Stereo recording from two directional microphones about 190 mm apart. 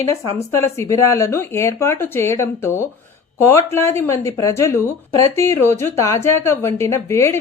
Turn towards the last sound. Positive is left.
turn(degrees=15)  # may be behind; listen again after turning